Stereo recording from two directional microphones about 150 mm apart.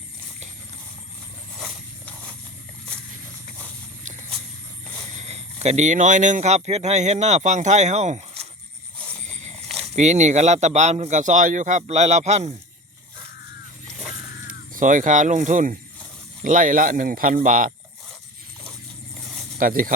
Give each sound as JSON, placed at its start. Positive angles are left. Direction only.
{"t": 1.5, "sound": "a sound", "side_deg": 5}
{"t": 5.1, "sound": "speech", "side_deg": -45}
{"t": 9.2, "sound": "a sound", "side_deg": -55}
{"t": 9.8, "sound": "speech", "side_deg": -50}
{"t": 14.8, "sound": "speech", "side_deg": -60}
{"t": 19.5, "sound": "speech", "side_deg": -70}